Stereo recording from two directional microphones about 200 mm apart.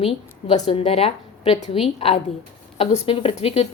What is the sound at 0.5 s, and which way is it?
A woman's voice, 30° left (ahead or behind).